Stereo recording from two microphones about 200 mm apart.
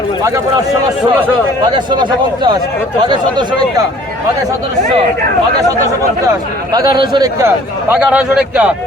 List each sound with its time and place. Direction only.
0.2 s a man's voice: 15° right (ahead or behind)
1.6 s speech: 20° right (ahead or behind)
6.7 s a man's voice: 20° right (ahead or behind); by 8.7 s 5° right (ahead or behind)